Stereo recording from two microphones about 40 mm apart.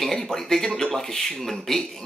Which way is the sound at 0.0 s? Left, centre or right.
Centre.